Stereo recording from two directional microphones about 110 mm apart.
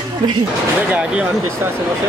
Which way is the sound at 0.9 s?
15° right (ahead or behind).